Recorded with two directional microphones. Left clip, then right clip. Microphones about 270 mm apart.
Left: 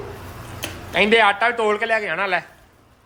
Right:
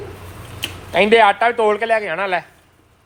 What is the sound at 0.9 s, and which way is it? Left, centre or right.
A man's voice, centre.